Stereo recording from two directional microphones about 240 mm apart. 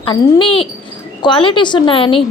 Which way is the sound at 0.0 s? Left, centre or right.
Left.